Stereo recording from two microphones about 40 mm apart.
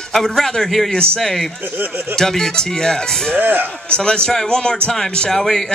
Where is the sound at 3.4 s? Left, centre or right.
Right.